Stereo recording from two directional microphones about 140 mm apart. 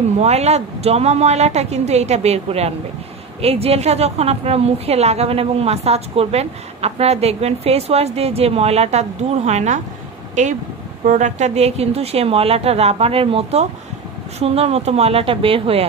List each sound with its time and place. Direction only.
0.2 s a woman's voice: 50° right (ahead or behind)